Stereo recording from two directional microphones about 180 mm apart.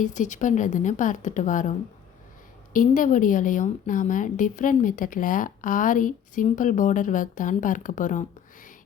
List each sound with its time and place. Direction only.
0.0 s a woman's voice: 45° left (ahead or behind)
2.7 s a woman's voice: 45° left (ahead or behind)